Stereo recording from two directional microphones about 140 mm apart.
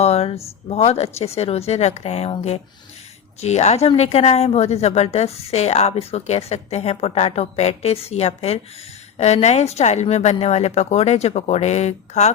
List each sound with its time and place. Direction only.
0.0 s speech: 45° left (ahead or behind)
3.4 s speech: 50° left (ahead or behind)